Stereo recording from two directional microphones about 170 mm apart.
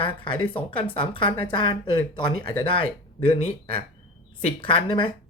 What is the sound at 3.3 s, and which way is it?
Speech, 45° left (ahead or behind).